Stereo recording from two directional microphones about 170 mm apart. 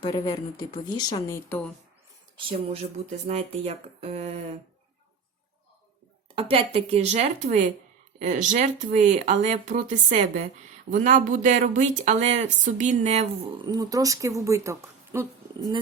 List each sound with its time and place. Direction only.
0.0 s speech: 20° left (ahead or behind)
1.5 s speech: 10° left (ahead or behind)
2.3 s speech: 30° right (ahead or behind)
6.3 s speech: 35° right (ahead or behind)
13.7 s speech: 20° right (ahead or behind)